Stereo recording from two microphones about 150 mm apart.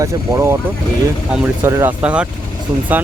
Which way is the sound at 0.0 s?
15° right (ahead or behind).